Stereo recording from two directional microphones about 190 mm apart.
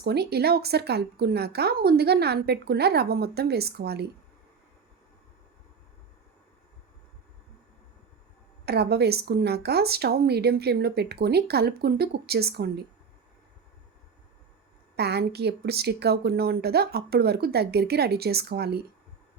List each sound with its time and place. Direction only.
0.0 s a woman's voice: 60° right (ahead or behind)
8.6 s a woman's voice: 55° right (ahead or behind)
14.9 s a woman's voice: 60° right (ahead or behind)